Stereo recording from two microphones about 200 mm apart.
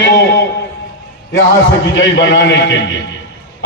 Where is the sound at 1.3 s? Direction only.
65° left (ahead or behind).